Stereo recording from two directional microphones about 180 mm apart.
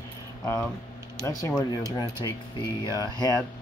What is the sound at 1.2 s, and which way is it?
Speech, 15° left (ahead or behind).